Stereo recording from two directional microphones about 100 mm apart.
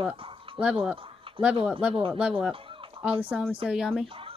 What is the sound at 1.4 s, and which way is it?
Speech, 60° right (ahead or behind).